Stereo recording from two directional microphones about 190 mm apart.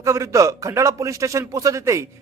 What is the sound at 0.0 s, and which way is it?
A man's voice, 15° right (ahead or behind).